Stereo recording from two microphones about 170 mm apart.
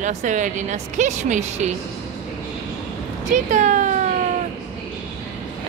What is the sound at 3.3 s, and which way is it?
Speech, 45° right (ahead or behind).